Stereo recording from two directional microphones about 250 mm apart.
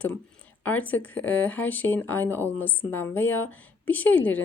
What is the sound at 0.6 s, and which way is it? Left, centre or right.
Speech, centre.